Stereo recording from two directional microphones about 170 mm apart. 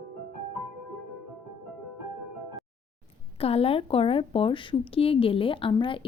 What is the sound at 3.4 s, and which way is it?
Speech, 35° left (ahead or behind).